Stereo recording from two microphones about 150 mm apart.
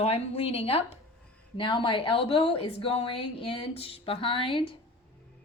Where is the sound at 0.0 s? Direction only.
40° left (ahead or behind).